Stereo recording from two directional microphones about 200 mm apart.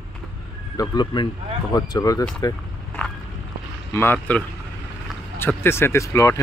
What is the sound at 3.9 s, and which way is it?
Speech, 10° left (ahead or behind).